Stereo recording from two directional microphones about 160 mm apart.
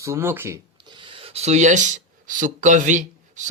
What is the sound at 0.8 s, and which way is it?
Speech, 30° right (ahead or behind).